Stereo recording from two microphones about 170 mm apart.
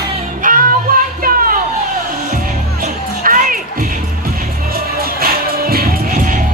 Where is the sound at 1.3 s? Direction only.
55° right (ahead or behind).